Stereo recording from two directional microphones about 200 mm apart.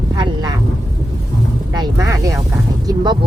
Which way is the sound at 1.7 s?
20° right (ahead or behind).